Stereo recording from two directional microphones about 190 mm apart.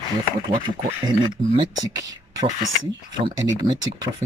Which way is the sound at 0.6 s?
25° right (ahead or behind).